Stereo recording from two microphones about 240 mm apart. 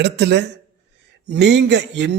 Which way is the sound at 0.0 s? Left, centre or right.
Right.